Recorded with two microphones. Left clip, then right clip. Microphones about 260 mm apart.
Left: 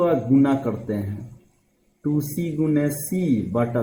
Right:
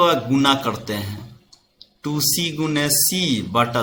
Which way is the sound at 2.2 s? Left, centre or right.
Centre.